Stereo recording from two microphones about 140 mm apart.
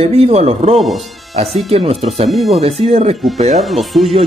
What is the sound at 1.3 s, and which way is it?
Speech, 45° right (ahead or behind).